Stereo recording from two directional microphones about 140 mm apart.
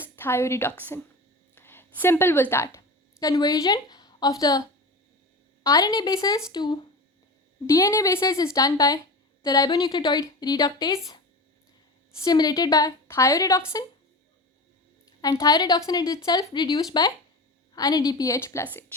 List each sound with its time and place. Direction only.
0.0 s a woman's voice: 15° left (ahead or behind)
5.6 s speech: 25° left (ahead or behind)
7.7 s speech: 20° left (ahead or behind)
12.2 s speech: 30° left (ahead or behind)
15.2 s speech: 25° left (ahead or behind)